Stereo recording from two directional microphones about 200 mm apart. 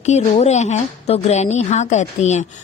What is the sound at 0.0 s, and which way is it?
A woman's voice, 35° left (ahead or behind).